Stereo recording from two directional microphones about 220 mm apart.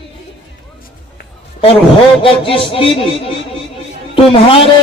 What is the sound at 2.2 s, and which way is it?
Speech, 25° left (ahead or behind).